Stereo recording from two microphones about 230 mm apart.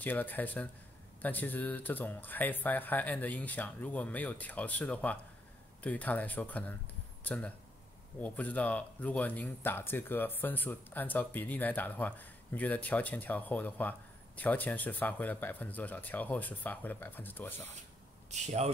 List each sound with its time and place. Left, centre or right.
0.0 s speech: centre
18.3 s speech: right